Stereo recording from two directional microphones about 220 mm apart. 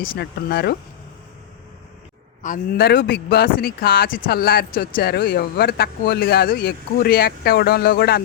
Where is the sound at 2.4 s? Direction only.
35° left (ahead or behind).